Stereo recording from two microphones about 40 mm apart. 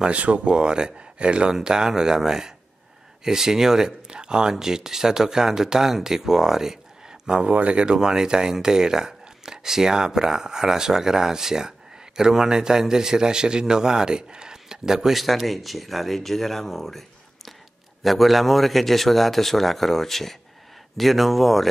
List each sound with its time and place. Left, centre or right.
0.0 s speech: right; by 15.2 s centre
15.2 s a man's voice: centre
18.0 s a man's voice: centre